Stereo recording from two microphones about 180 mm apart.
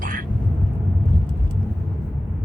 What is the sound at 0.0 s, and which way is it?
Thunder, 50° right (ahead or behind).